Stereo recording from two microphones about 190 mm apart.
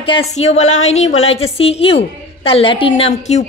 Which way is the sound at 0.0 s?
30° left (ahead or behind).